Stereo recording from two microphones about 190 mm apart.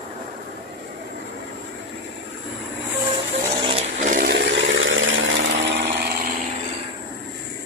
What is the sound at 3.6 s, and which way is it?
Vehicle, 25° right (ahead or behind).